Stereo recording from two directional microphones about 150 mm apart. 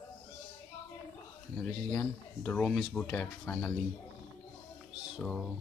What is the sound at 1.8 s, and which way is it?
Speech, 10° left (ahead or behind).